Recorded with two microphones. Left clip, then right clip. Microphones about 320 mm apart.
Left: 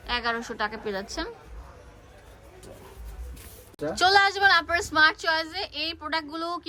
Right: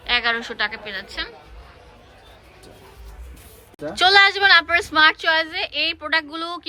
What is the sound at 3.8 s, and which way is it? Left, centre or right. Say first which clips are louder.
A woman's voice: right 6 dB; centre.